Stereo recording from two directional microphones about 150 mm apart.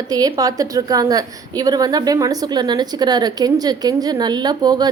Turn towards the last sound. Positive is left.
turn(degrees=-25)  # may be behind; listen again after turning